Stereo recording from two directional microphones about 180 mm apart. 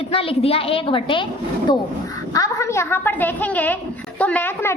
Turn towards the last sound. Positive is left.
turn(degrees=15)  # may be behind; listen again after turning